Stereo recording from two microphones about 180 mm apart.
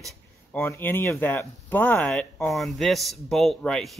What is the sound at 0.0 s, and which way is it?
Speech, 10° left (ahead or behind).